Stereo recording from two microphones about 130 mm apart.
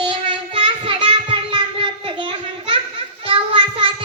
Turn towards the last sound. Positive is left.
turn(degrees=-40)  # may be behind; listen again after turning